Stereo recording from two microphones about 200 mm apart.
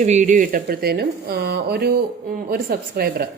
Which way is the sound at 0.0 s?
35° right (ahead or behind).